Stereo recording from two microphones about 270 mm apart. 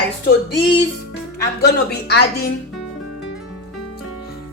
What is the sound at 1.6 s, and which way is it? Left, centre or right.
Speech, left.